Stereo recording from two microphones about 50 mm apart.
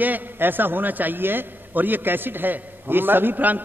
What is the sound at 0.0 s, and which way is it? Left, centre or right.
A man's voice, right.